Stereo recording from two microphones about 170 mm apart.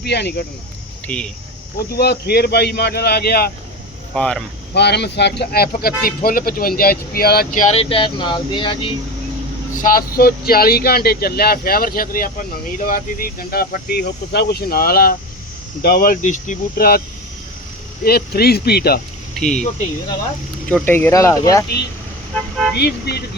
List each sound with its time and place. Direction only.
0.0 s speech: 75° left (ahead or behind)
1.0 s speech: 5° left (ahead or behind)
1.9 s speech: 70° left (ahead or behind)
4.1 s speech: 5° left (ahead or behind)
4.7 s speech: 75° left (ahead or behind)
5.4 s speech: 65° left (ahead or behind); by 7.8 s 50° left (ahead or behind)
7.8 s speech: 30° left (ahead or behind)
9.8 s speech: 60° left (ahead or behind)
18.0 s speech: 65° left (ahead or behind)
19.4 s speech: 5° left (ahead or behind)
20.7 s speech: 10° left (ahead or behind)
22.7 s speech: 70° left (ahead or behind)